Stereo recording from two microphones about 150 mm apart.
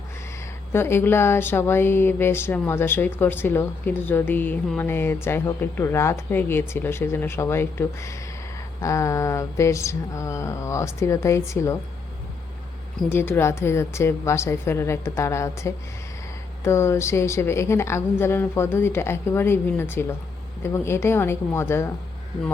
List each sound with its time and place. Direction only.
0.7 s speech: 15° left (ahead or behind)
8.8 s mantra: 20° left (ahead or behind)
13.1 s speech: 15° left (ahead or behind)